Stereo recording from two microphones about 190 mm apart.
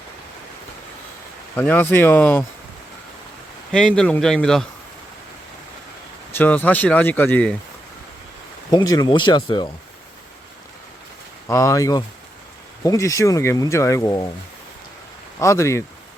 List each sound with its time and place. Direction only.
1.5 s speech: 10° left (ahead or behind)
3.7 s speech: 5° left (ahead or behind)
6.3 s speech: 10° left (ahead or behind)
8.7 s speech: 20° left (ahead or behind)
11.4 s speech: 15° left (ahead or behind)
15.4 s speech: 15° left (ahead or behind)